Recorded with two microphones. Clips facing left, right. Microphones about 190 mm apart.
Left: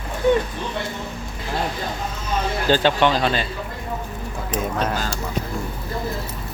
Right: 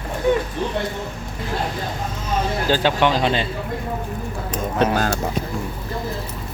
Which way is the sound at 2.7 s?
10° right (ahead or behind).